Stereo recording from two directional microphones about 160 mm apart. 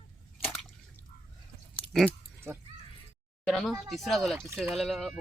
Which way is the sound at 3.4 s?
Centre (ahead or behind).